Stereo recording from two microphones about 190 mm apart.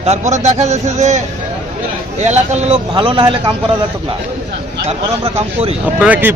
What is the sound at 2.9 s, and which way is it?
Speech, 25° right (ahead or behind).